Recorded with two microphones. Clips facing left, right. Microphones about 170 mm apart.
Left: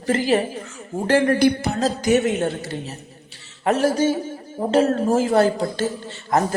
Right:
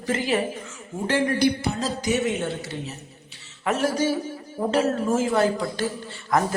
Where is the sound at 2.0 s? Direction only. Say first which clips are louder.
Left 6 dB; 60° left (ahead or behind).